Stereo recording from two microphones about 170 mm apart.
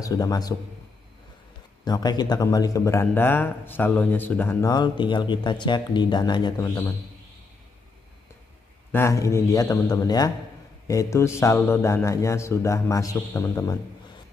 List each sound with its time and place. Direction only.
0.0 s a man's voice: 20° left (ahead or behind)
1.9 s a man's voice: 25° left (ahead or behind)
8.9 s a man's voice: 15° left (ahead or behind)